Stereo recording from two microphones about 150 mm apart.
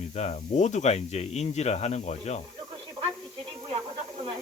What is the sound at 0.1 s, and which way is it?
Speech, 45° left (ahead or behind).